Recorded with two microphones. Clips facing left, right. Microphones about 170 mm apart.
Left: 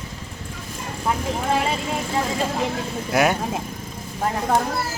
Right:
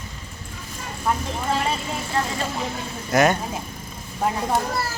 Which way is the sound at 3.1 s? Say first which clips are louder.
Right 1 dB; 5° left (ahead or behind).